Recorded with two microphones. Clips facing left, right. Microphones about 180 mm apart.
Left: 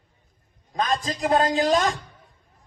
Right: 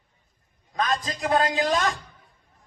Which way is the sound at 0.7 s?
25° left (ahead or behind).